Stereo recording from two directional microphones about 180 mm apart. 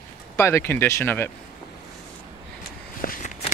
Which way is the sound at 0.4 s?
15° left (ahead or behind).